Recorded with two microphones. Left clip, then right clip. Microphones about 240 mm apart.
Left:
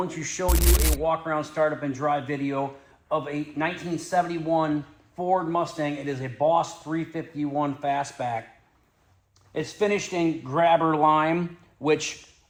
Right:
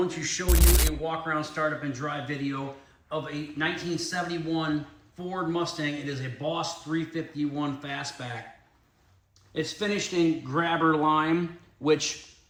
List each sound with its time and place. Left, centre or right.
0.0 s a man's voice: left
0.4 s speech: centre
1.0 s a man's voice: left
9.6 s a man's voice: left